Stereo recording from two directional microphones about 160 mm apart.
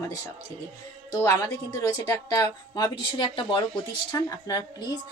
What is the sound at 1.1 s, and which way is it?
A woman's voice, 20° left (ahead or behind).